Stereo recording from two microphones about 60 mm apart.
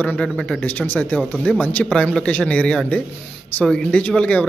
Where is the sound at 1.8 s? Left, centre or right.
Centre.